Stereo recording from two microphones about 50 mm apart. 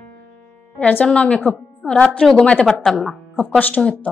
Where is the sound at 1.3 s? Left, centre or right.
Left.